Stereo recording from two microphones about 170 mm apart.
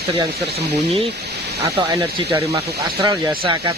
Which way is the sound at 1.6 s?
20° right (ahead or behind).